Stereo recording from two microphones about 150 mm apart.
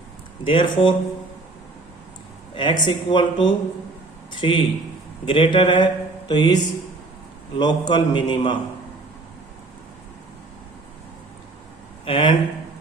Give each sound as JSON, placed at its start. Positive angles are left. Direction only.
{"t": 0.4, "sound": "speech", "side_deg": 35}
{"t": 2.6, "sound": "speech", "side_deg": 30}
{"t": 7.6, "sound": "speech", "side_deg": 30}
{"t": 12.0, "sound": "speech", "side_deg": 35}